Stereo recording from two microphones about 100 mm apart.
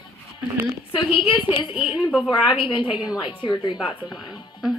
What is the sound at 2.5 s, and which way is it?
A woman's voice, 55° left (ahead or behind).